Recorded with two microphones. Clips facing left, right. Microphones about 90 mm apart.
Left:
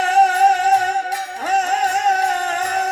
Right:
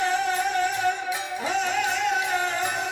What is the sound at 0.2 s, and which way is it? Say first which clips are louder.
Music: left 11 dB; 85° left.